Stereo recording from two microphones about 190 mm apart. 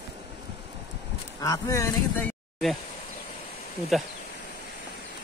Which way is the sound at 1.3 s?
20° left (ahead or behind).